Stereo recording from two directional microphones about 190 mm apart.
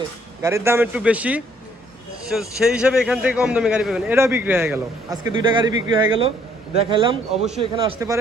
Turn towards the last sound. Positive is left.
turn(degrees=-30)  # may be behind; listen again after turning